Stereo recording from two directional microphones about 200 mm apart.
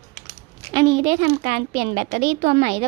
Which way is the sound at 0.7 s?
20° right (ahead or behind).